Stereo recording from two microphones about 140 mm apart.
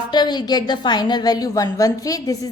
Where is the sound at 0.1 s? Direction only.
30° left (ahead or behind).